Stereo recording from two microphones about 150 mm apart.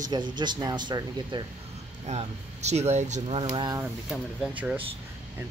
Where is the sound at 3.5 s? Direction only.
25° right (ahead or behind).